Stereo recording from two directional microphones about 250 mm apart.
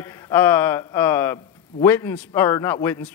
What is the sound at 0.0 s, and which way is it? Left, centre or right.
Speech, centre.